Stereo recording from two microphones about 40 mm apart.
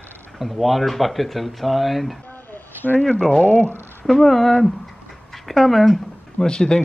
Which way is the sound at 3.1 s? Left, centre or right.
Left.